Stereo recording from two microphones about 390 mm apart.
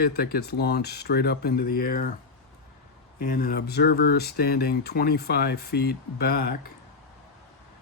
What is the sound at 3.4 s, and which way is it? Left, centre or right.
Speech, left.